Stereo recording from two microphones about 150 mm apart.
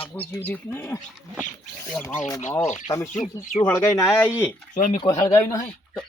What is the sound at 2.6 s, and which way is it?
Speech, 55° left (ahead or behind).